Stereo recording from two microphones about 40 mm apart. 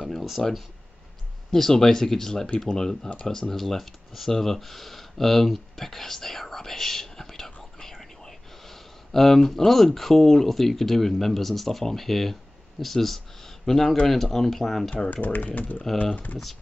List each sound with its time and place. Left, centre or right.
0.1 s a sound: centre
0.4 s speech: centre
7.8 s whispering: centre
9.8 s speech: centre
15.0 s speech: left